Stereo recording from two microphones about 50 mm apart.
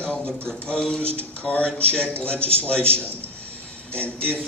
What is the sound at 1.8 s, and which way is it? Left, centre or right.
Speech, left.